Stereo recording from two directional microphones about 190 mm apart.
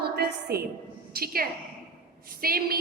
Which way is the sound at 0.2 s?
55° right (ahead or behind).